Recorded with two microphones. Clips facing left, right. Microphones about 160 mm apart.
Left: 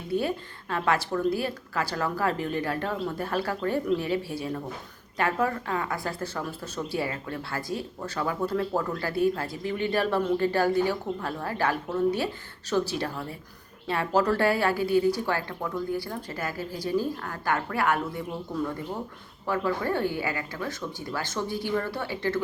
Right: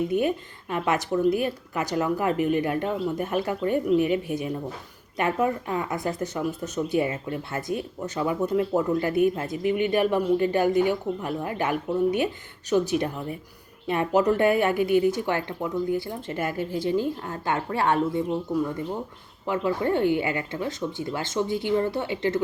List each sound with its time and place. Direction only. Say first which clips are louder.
0.1 s speech: right 3 dB; 20° right (ahead or behind)
19.5 s speech: right 3 dB; 20° right (ahead or behind)